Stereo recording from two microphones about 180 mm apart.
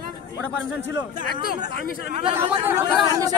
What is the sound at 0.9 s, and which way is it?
Speech, 25° right (ahead or behind).